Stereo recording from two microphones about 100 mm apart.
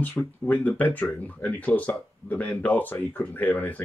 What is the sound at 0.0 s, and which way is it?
Speech, 15° left (ahead or behind).